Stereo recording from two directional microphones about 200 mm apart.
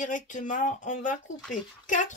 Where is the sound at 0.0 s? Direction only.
40° left (ahead or behind).